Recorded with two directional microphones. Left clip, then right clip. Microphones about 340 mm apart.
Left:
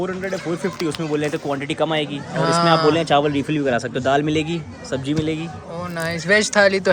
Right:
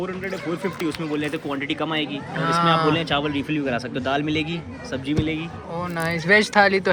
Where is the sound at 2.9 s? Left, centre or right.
Left.